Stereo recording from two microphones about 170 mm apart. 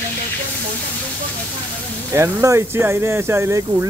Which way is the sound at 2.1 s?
15° right (ahead or behind).